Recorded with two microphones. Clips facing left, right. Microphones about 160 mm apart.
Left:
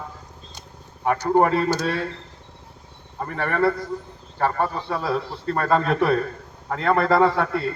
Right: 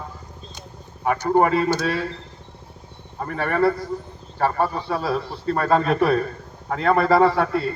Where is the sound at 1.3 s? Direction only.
5° right (ahead or behind).